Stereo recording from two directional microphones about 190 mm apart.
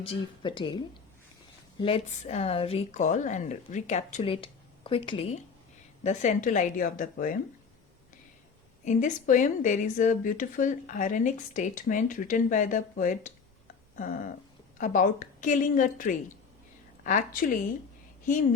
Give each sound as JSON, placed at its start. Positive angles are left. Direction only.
{"t": 0.0, "sound": "a woman's voice", "side_deg": 25}
{"t": 1.8, "sound": "speech", "side_deg": 30}
{"t": 8.8, "sound": "a woman's voice", "side_deg": 40}
{"t": 14.8, "sound": "a woman's voice", "side_deg": 45}